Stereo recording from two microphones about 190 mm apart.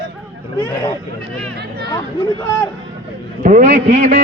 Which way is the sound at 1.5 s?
60° right (ahead or behind).